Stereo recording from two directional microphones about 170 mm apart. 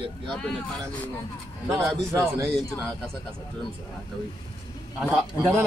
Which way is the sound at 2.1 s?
15° right (ahead or behind).